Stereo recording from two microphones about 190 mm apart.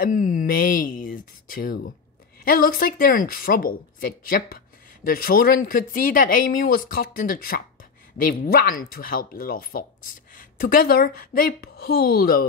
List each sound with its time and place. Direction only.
0.0 s a woman's voice: 45° left (ahead or behind)